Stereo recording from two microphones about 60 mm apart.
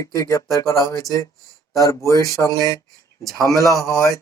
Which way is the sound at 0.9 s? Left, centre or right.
Left.